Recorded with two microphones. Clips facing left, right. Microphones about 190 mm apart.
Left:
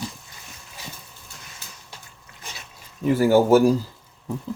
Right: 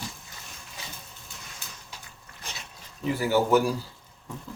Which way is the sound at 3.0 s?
45° left (ahead or behind).